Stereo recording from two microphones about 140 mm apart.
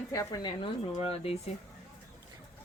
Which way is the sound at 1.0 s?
50° left (ahead or behind).